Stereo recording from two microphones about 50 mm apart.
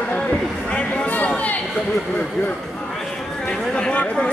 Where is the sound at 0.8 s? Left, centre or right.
Left.